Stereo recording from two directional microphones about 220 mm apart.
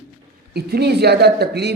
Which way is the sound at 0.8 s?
50° right (ahead or behind).